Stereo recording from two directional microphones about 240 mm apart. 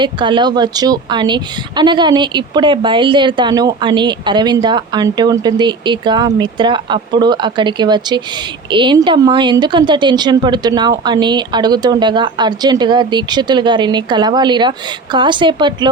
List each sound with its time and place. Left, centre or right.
0.0 s a woman's voice: centre